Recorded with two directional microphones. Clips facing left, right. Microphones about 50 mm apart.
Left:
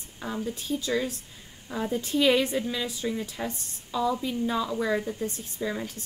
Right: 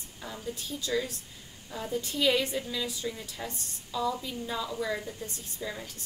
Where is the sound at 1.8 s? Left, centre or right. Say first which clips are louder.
Left 5 dB; left.